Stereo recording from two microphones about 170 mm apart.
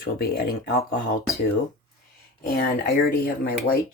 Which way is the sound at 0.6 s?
60° left (ahead or behind).